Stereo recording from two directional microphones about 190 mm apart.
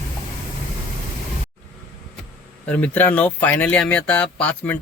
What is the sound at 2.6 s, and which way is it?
Speech, 5° left (ahead or behind).